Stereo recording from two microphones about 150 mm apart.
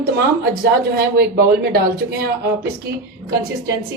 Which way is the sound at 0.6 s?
90° right.